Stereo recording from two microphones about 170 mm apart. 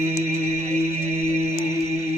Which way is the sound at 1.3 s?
40° right (ahead or behind).